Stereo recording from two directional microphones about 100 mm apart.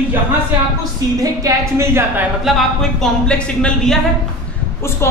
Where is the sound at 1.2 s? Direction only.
30° right (ahead or behind).